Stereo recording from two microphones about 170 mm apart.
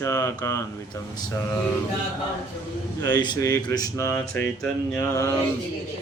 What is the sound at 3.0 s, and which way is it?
Speech, 25° left (ahead or behind).